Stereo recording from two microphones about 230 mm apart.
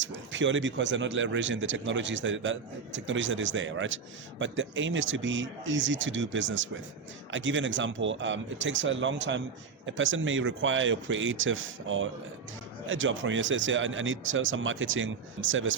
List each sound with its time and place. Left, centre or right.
0.0 s speech: right